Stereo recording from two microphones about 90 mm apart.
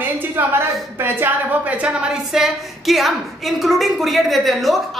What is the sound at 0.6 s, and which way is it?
A woman's voice, 25° right (ahead or behind).